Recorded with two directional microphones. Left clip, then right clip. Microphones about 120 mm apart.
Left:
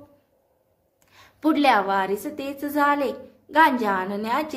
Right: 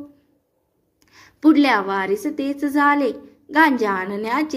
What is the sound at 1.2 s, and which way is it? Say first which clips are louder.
A woman's voice: right 6 dB; 20° right (ahead or behind).